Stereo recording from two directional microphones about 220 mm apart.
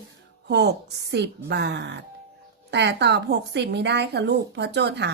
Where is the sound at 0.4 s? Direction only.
50° right (ahead or behind).